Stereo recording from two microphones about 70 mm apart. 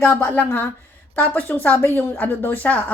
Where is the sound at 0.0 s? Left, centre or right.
Left.